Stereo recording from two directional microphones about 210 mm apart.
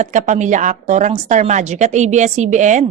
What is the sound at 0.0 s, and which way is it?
A woman's voice, 35° right (ahead or behind).